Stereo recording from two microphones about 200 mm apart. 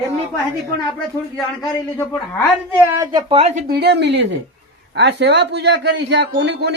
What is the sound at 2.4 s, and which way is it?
A woman's voice, 10° right (ahead or behind).